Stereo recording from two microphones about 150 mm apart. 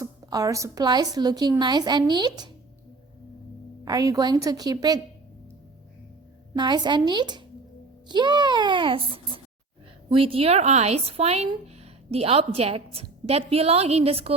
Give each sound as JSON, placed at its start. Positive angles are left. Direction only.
{"t": 0.0, "sound": "a woman's voice", "side_deg": -25}
{"t": 3.8, "sound": "a woman's voice", "side_deg": -25}
{"t": 6.6, "sound": "a woman's voice", "side_deg": -30}